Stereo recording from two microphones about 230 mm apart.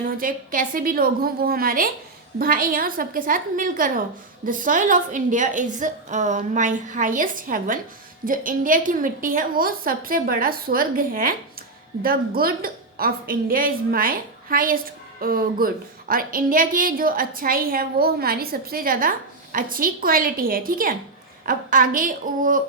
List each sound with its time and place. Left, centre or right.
0.2 s a woman's voice: right